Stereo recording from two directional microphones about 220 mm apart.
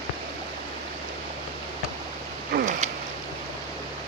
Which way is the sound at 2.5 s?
40° right (ahead or behind).